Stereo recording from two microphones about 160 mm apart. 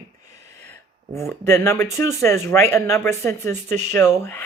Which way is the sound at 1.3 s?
15° left (ahead or behind).